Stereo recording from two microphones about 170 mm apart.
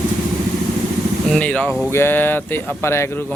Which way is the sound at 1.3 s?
5° left (ahead or behind).